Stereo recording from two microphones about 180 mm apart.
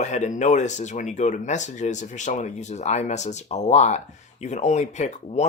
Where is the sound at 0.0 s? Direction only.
40° left (ahead or behind).